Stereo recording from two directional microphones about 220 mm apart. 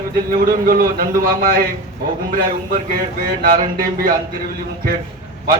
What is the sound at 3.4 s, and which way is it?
Speech, 40° right (ahead or behind).